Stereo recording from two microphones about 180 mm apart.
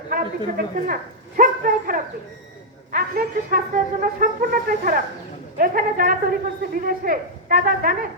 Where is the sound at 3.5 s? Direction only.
50° right (ahead or behind).